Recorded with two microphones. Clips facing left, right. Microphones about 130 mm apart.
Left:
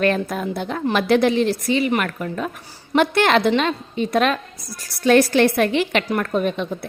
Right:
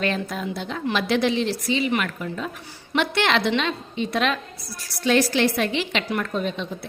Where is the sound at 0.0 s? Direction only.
50° left (ahead or behind).